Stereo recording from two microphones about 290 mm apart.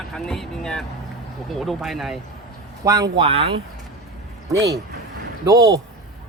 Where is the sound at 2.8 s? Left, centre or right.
Centre.